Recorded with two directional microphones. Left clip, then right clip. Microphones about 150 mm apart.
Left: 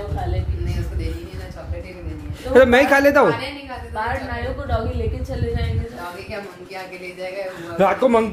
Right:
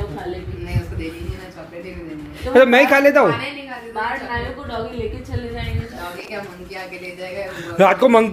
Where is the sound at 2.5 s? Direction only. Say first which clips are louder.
Right 1 dB; 20° left (ahead or behind).